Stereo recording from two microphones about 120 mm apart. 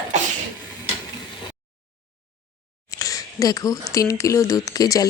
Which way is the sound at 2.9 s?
30° left (ahead or behind).